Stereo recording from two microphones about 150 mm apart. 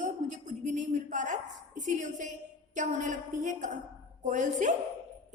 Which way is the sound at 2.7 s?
55° right (ahead or behind).